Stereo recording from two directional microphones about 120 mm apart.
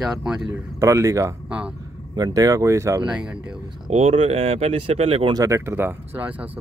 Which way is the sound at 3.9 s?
60° right (ahead or behind).